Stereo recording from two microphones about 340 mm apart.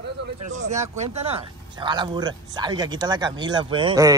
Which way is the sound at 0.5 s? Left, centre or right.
Right.